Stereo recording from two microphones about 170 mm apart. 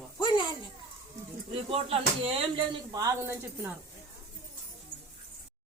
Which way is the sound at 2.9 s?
15° right (ahead or behind).